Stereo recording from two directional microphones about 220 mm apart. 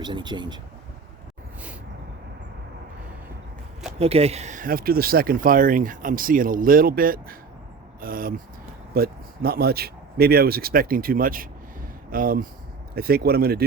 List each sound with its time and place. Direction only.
0.0 s speech: 20° right (ahead or behind)
3.9 s speech: 30° right (ahead or behind); by 13.7 s 45° right (ahead or behind)